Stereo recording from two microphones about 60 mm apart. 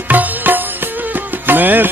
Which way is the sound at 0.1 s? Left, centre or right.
Right.